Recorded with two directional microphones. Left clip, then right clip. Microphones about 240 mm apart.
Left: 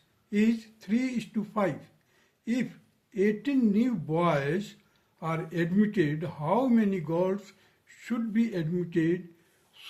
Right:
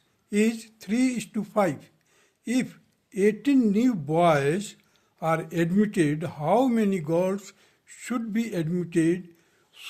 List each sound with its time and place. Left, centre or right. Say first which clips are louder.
0.3 s speech: right 3 dB; right
2.4 s a sound: right 4 dB; right
3.1 s speech: right 5 dB; right